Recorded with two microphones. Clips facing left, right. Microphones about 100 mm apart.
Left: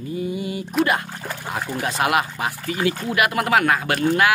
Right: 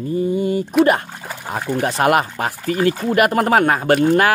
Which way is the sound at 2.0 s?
40° right (ahead or behind).